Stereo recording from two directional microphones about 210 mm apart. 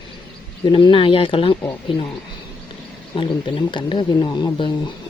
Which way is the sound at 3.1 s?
25° left (ahead or behind).